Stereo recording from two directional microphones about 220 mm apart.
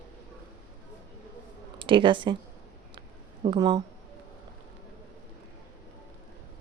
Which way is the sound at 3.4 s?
20° right (ahead or behind).